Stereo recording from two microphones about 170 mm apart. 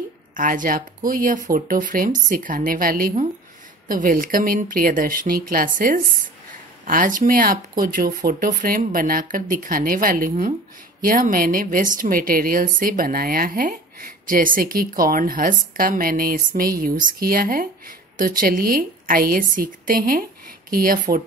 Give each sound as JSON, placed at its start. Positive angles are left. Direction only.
{"t": 0.4, "sound": "a woman's voice", "side_deg": -55}